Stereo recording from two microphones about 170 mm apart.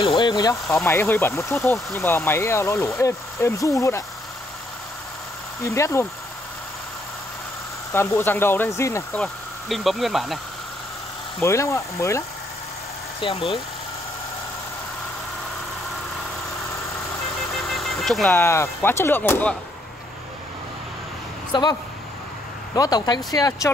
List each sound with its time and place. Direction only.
0.0 s speech: 30° left (ahead or behind)
5.6 s speech: 15° left (ahead or behind)
7.9 s speech: 15° left (ahead or behind)
9.2 s speech: centre (ahead or behind)
11.4 s speech: 15° left (ahead or behind)
13.2 s speech: 30° left (ahead or behind)
17.6 s vehicle: centre (ahead or behind)
18.3 s speech: 15° left (ahead or behind)
21.5 s speech: 25° left (ahead or behind)
22.8 s speech: 25° left (ahead or behind)